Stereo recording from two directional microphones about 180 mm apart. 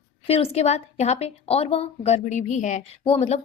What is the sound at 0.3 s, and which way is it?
A woman's voice, 35° left (ahead or behind).